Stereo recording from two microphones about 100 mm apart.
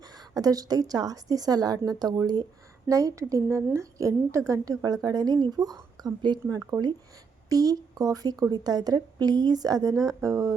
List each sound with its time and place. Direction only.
0.0 s a woman's voice: 40° right (ahead or behind)